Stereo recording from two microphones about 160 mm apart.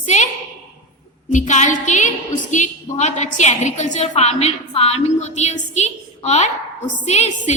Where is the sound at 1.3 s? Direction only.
50° left (ahead or behind).